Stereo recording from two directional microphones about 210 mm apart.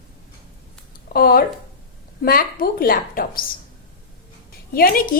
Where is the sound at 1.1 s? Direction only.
45° left (ahead or behind).